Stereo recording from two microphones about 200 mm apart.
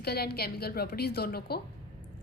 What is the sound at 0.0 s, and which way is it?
A woman's voice, 55° left (ahead or behind).